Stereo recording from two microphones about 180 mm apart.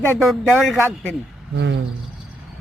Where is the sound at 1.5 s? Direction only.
75° right (ahead or behind).